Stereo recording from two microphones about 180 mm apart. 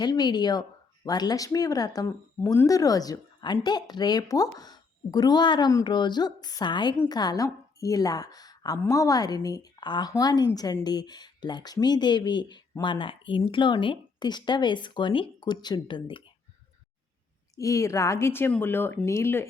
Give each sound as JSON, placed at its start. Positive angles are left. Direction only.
{"t": 0.0, "sound": "speech", "side_deg": 25}
{"t": 17.5, "sound": "speech", "side_deg": 15}